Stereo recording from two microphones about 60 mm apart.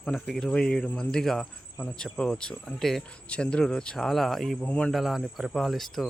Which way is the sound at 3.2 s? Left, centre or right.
Centre.